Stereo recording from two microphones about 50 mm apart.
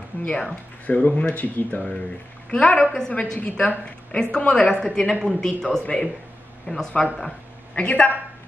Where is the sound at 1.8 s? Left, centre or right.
Centre.